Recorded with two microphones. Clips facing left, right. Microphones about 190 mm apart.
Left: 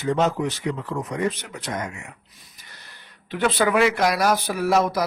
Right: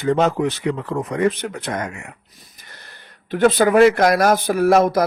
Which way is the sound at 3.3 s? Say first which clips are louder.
Right 6 dB; 45° right (ahead or behind).